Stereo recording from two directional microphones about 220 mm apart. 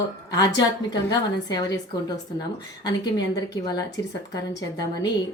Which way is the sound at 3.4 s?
15° left (ahead or behind).